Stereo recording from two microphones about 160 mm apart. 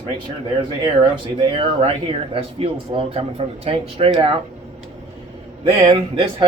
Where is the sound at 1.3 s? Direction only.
35° right (ahead or behind).